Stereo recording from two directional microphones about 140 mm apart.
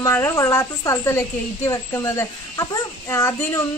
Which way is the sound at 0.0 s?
20° left (ahead or behind).